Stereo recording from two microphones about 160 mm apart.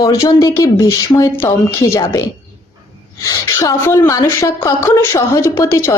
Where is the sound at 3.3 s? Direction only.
20° left (ahead or behind).